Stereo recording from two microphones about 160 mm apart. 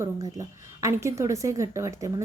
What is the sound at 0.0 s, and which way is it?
A woman's voice, 20° right (ahead or behind).